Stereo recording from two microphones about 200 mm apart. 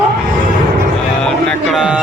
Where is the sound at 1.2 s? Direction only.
Centre (ahead or behind).